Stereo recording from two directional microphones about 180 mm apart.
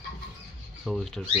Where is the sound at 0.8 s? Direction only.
Centre (ahead or behind).